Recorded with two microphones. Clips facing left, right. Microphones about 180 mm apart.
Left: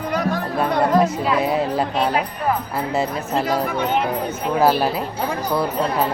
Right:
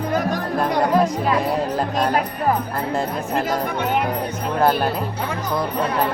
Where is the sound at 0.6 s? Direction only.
5° left (ahead or behind).